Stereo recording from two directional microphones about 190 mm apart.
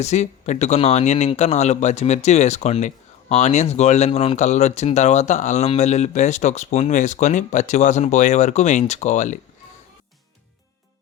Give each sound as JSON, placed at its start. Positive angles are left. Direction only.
{"t": 0.0, "sound": "speech", "side_deg": 35}